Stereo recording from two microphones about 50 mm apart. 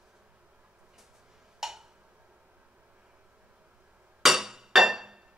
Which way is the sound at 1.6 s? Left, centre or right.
Centre.